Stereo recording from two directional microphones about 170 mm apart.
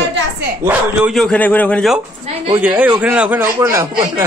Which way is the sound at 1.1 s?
5° left (ahead or behind).